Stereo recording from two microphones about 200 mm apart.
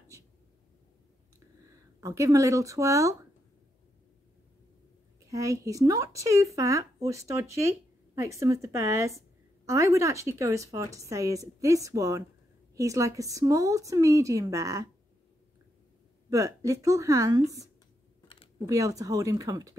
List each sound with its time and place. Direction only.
2.0 s speech: 15° right (ahead or behind)
5.3 s speech: 15° right (ahead or behind)
16.3 s speech: 15° right (ahead or behind)
18.7 s speech: 15° right (ahead or behind)